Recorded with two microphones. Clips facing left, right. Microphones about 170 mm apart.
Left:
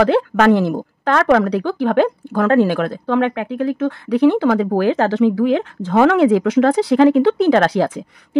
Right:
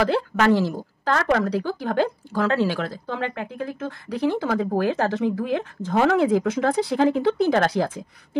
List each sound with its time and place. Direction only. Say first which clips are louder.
0.0 s a woman's voice: left 7 dB; 65° left (ahead or behind)